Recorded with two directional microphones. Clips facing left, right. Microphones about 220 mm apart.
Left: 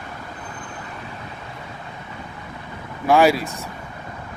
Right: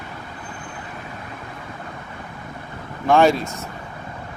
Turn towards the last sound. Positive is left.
turn(degrees=5)  # may be behind; listen again after turning